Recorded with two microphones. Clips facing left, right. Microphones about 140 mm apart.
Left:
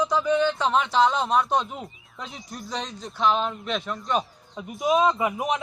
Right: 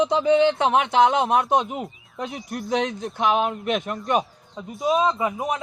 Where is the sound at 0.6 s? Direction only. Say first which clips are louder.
Right 3 dB; 60° right (ahead or behind).